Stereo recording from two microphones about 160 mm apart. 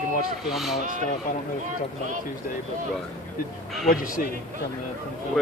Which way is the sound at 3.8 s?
60° left (ahead or behind).